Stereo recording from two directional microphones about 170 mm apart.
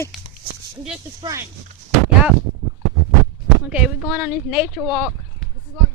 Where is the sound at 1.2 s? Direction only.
20° right (ahead or behind).